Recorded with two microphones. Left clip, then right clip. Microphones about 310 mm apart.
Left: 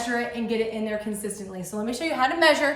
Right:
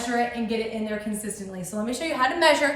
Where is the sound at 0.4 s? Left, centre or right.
Centre.